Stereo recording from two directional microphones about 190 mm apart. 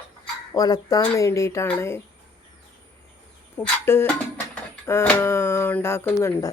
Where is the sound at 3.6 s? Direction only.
10° left (ahead or behind).